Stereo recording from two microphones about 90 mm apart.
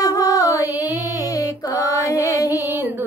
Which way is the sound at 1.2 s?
40° left (ahead or behind).